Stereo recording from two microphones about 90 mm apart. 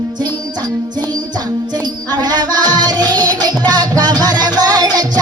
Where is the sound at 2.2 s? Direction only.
50° right (ahead or behind).